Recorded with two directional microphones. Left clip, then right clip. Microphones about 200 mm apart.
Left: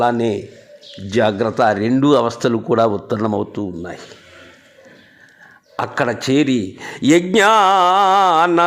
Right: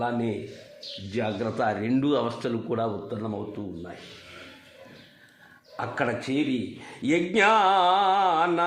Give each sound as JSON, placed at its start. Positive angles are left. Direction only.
{"t": 0.0, "sound": "a man's voice", "side_deg": 35}
{"t": 5.7, "sound": "a man's voice", "side_deg": 30}